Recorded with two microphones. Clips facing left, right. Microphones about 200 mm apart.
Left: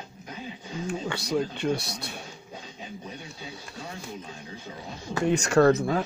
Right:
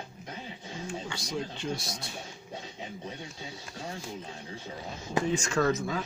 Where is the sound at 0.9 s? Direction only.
65° left (ahead or behind).